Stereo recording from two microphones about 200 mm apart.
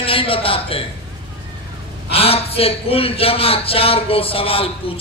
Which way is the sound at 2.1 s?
30° left (ahead or behind).